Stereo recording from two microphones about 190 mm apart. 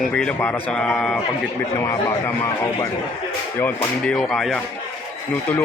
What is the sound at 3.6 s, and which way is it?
Speech, 5° left (ahead or behind).